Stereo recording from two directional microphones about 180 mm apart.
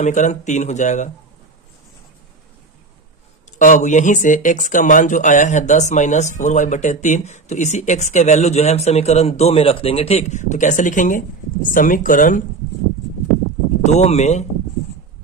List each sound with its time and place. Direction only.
0.0 s a man's voice: 40° left (ahead or behind)
3.6 s a man's voice: 45° left (ahead or behind)
13.8 s a man's voice: 40° left (ahead or behind)